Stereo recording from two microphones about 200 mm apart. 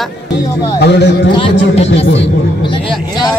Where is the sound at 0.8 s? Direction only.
60° left (ahead or behind).